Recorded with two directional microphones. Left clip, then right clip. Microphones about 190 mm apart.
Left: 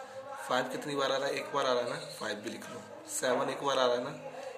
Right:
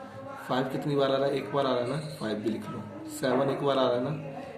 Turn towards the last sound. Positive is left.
turn(degrees=40)  # may be behind; listen again after turning